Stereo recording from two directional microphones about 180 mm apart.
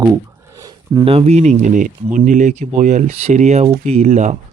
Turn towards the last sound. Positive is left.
turn(degrees=-40)  # may be behind; listen again after turning